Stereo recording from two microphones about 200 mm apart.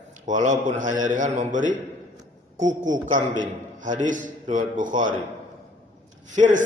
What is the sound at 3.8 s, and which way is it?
A man's voice, 40° right (ahead or behind).